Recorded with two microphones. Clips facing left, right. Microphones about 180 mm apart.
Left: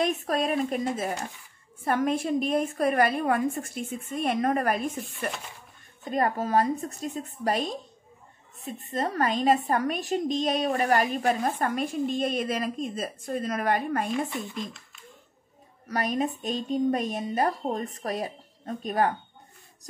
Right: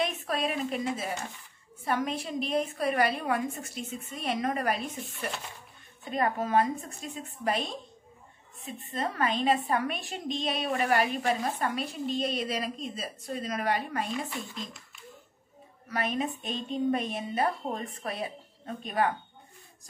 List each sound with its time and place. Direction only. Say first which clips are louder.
0.0 s a woman's voice: left 4 dB; 45° left (ahead or behind)
6.0 s a woman's voice: left 3 dB; 40° left (ahead or behind)
15.9 s speech: left 3 dB; 40° left (ahead or behind)